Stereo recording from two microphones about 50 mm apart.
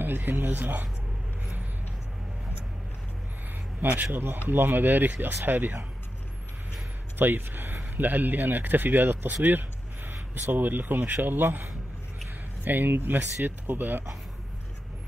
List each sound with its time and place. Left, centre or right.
0.0 s speech: right
3.8 s speech: right
7.2 s speech: right